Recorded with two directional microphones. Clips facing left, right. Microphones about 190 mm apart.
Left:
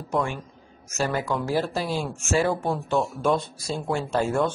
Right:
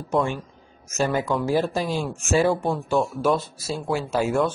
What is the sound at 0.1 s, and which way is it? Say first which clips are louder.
Speech: right 3 dB; 20° right (ahead or behind).